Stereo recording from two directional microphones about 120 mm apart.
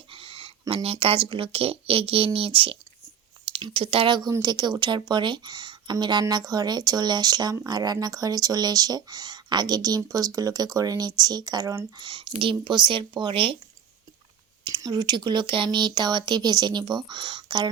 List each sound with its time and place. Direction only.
0.1 s a sound: 50° right (ahead or behind)
0.7 s speech: 55° right (ahead or behind); by 11.9 s 25° right (ahead or behind)
11.9 s speech: 45° right (ahead or behind)
14.8 s speech: 35° right (ahead or behind)